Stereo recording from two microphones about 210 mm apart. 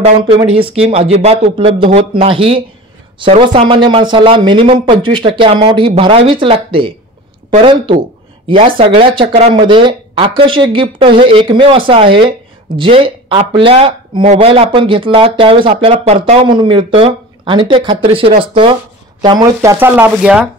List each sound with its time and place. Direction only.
0.9 s speech: 30° right (ahead or behind); by 20.4 s 5° right (ahead or behind)